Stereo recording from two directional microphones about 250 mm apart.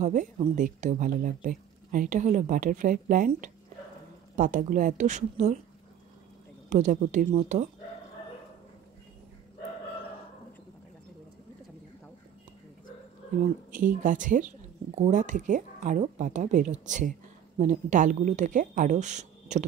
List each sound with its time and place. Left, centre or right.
0.0 s speech: right
6.7 s speech: right
13.7 s speech: right
19.5 s typing: right